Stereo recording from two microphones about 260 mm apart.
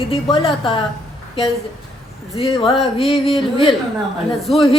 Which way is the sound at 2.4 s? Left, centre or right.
Left.